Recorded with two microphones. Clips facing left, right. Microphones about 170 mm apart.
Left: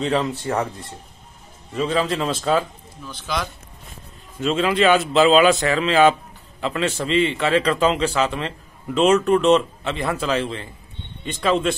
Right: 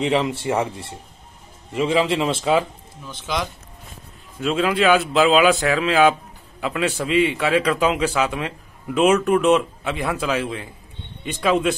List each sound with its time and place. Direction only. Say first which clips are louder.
0.5 s a man's voice: right 2 dB; 10° right (ahead or behind)
2.0 s speech: right 3 dB; 25° right (ahead or behind)
2.2 s speech: right 1 dB; 5° right (ahead or behind)
3.1 s speech: right 1 dB; 20° right (ahead or behind)
4.4 s a man's voice: left 1 dB; 5° right (ahead or behind)